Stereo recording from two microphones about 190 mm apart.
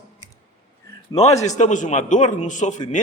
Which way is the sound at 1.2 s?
35° left (ahead or behind).